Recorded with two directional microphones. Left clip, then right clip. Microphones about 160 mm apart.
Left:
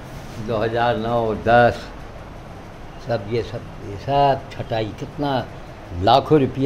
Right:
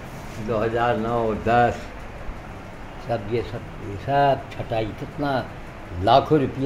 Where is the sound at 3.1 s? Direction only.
15° left (ahead or behind).